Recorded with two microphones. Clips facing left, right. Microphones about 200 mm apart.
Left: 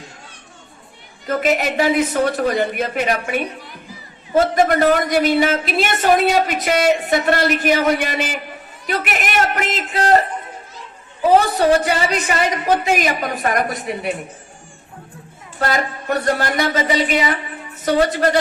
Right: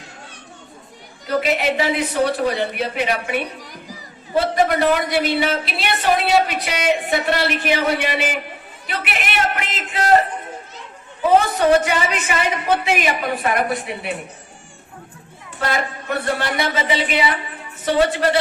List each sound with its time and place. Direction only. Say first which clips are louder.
1.3 s a woman's voice: left 1 dB; 45° left (ahead or behind)
11.3 s a woman's voice: right 1 dB; 35° left (ahead or behind)
15.5 s a woman's voice: left 2 dB; 40° left (ahead or behind)